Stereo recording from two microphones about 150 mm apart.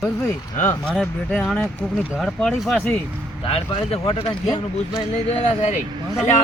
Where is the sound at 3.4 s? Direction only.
40° left (ahead or behind).